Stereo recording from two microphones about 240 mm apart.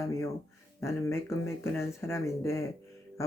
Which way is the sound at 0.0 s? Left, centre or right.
Centre.